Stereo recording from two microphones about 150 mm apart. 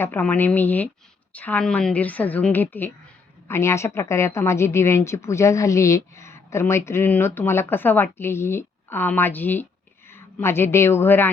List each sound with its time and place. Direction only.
0.0 s a woman's voice: 10° left (ahead or behind)